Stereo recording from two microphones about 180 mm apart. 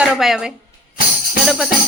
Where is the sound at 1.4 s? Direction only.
Centre (ahead or behind).